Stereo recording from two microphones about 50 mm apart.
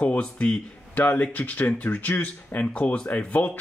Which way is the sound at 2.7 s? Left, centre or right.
Left.